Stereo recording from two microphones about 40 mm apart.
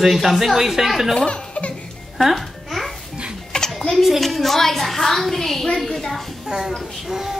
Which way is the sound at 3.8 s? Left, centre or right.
Centre.